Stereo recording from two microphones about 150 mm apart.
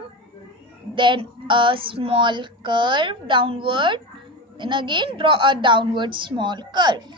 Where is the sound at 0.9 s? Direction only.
35° right (ahead or behind).